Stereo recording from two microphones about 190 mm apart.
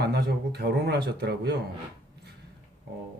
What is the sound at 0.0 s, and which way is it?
Speech, 55° right (ahead or behind).